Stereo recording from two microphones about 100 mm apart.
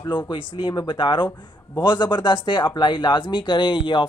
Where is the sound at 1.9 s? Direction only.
50° left (ahead or behind).